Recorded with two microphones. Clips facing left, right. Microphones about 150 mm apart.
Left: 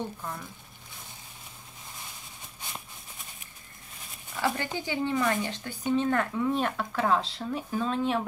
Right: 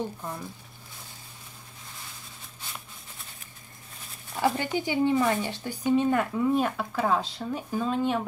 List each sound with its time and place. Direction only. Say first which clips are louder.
0.2 s speech: right 2 dB; 20° right (ahead or behind)
4.4 s speech: right 4 dB; 15° right (ahead or behind)